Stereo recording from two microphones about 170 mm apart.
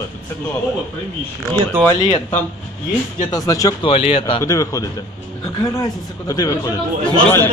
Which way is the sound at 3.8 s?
35° left (ahead or behind).